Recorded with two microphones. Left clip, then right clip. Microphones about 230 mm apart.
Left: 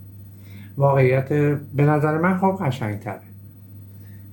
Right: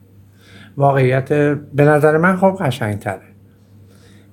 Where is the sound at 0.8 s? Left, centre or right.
Right.